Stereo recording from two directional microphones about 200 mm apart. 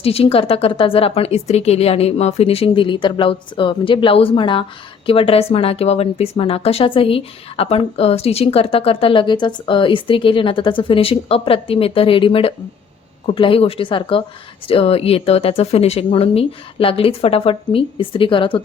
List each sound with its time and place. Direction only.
0.0 s a woman's voice: 30° left (ahead or behind)